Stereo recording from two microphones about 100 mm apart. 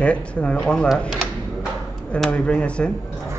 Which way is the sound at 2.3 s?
10° left (ahead or behind).